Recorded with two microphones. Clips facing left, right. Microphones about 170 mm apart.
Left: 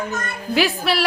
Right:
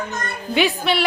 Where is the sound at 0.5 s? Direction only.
Centre (ahead or behind).